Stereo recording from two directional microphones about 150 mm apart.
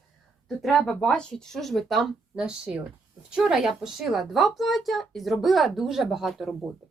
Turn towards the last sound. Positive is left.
turn(degrees=0)  # may be behind; listen again after turning